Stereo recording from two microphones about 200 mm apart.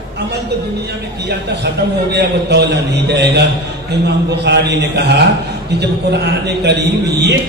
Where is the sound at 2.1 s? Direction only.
55° right (ahead or behind).